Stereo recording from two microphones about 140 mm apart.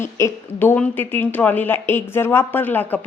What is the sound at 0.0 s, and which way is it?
A woman's voice, 15° left (ahead or behind).